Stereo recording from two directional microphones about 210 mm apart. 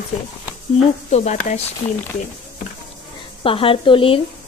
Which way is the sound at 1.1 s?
35° left (ahead or behind).